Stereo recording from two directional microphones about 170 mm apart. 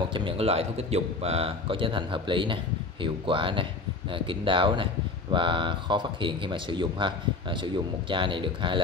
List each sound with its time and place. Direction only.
0.0 s a man's voice: 30° right (ahead or behind)